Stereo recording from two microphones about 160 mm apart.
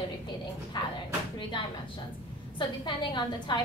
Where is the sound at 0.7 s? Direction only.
25° left (ahead or behind).